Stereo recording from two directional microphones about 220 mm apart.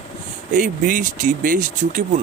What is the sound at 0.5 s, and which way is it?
Speech, 35° right (ahead or behind).